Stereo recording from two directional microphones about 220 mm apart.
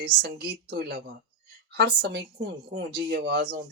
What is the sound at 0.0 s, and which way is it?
Speech, 45° right (ahead or behind).